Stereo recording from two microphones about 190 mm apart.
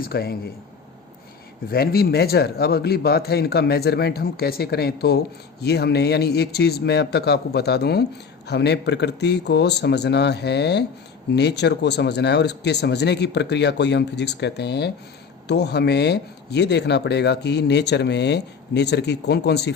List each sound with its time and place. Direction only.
0.0 s speech: 55° left (ahead or behind)
1.7 s speech: 55° left (ahead or behind)